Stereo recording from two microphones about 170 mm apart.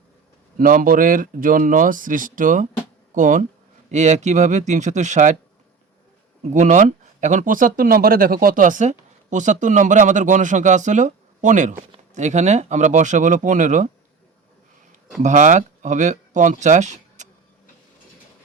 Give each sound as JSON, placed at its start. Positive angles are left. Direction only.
{"t": 0.6, "sound": "speech", "side_deg": -55}
{"t": 6.4, "sound": "speech", "side_deg": -45}
{"t": 15.2, "sound": "speech", "side_deg": -45}